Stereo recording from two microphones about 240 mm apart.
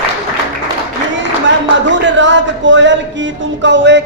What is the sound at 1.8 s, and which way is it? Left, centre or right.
A man's voice, right.